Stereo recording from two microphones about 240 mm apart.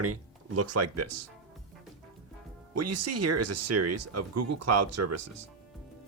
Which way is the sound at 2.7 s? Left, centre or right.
Right.